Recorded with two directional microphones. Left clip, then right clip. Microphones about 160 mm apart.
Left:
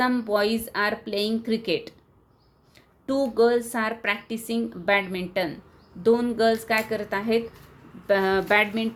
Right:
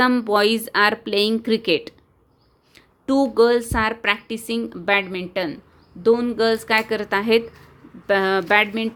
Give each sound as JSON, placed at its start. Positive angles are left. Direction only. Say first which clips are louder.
{"t": 0.0, "sound": "a woman's voice", "louder": "right 6 dB", "side_deg": -45}
{"t": 8.0, "sound": "speech", "louder": "right 3 dB", "side_deg": -25}